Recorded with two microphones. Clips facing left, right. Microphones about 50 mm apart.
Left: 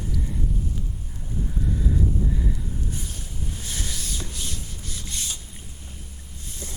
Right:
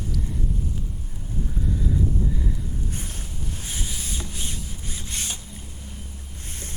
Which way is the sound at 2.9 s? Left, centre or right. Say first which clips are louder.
Even; right.